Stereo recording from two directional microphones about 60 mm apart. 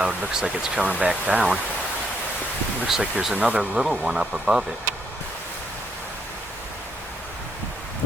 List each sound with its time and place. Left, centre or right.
0.0 s speech: centre
2.8 s speech: centre